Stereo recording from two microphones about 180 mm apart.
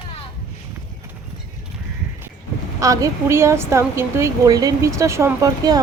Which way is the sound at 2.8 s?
20° right (ahead or behind).